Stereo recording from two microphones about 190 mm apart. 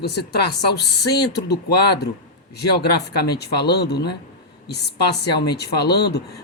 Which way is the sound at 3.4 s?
60° left (ahead or behind).